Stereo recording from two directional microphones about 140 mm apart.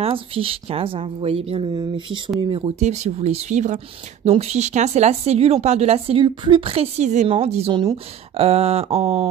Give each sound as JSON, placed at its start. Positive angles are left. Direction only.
{"t": 0.0, "sound": "speech", "side_deg": -40}
{"t": 2.5, "sound": "speech", "side_deg": -45}
{"t": 7.7, "sound": "speech", "side_deg": -35}